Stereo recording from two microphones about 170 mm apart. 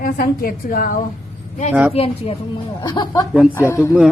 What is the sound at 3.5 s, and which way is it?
Speech, 15° left (ahead or behind).